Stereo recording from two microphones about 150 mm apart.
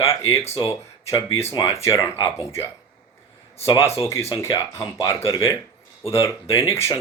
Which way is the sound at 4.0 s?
20° left (ahead or behind).